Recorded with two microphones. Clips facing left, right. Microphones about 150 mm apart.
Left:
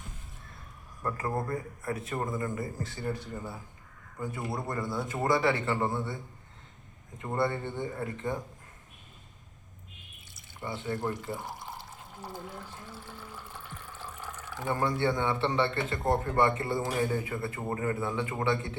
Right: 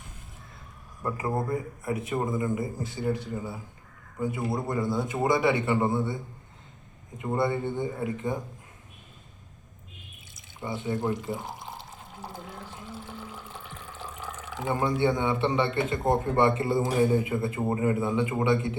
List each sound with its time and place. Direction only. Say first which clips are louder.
1.0 s a man's voice: right 3 dB; 15° right (ahead or behind)
7.2 s a man's voice: right 3 dB; 15° right (ahead or behind)
10.3 s speech: right 3 dB; 15° right (ahead or behind)